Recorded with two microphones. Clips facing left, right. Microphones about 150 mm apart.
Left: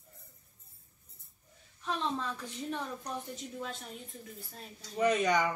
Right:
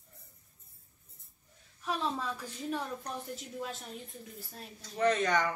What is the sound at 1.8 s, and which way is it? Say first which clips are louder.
A woman's voice: even; 5° right (ahead or behind).